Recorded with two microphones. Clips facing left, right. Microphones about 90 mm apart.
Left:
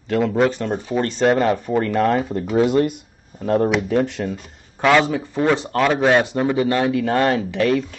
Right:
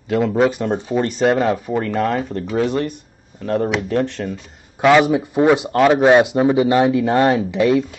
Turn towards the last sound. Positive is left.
turn(degrees=-10)  # may be behind; listen again after turning